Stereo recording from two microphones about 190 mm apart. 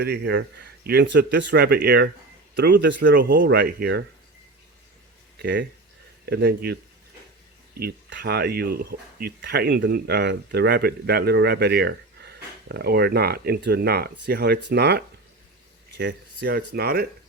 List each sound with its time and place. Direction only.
0.0 s speech: 60° right (ahead or behind)
5.4 s speech: 60° right (ahead or behind)
7.8 s speech: 55° right (ahead or behind)